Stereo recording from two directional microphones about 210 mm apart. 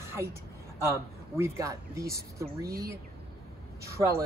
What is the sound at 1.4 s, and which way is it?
Speech, 15° right (ahead or behind).